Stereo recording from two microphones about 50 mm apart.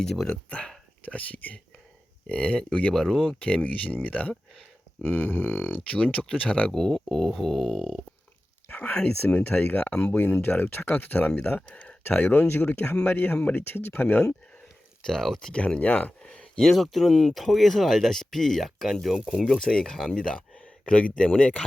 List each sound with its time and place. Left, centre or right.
0.0 s speech: centre
1.0 s speech: left
2.9 s speech: centre
3.4 s speech: left
5.0 s speech: left
6.7 s speech: centre
8.7 s a sound: left
9.2 s speech: left
11.7 s a sound: left
12.1 s speech: left
15.0 s speech: centre
15.5 s speech: left
16.6 s speech: centre; by 21.6 s left